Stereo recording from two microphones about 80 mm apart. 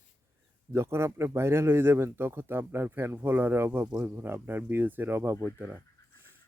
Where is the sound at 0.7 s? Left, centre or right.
Right.